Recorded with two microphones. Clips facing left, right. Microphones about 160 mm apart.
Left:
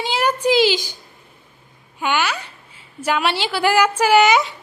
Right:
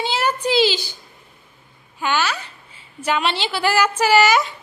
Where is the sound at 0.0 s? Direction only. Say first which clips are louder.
Left 2 dB; 10° left (ahead or behind).